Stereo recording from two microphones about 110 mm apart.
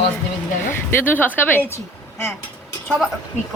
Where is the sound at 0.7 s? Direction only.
20° left (ahead or behind).